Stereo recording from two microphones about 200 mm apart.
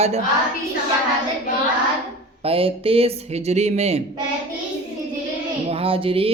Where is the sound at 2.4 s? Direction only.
30° right (ahead or behind).